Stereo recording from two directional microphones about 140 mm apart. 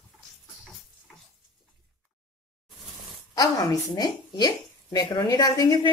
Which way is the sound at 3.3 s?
25° left (ahead or behind).